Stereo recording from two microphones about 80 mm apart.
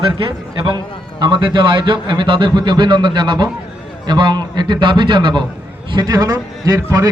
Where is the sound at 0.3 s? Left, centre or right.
Right.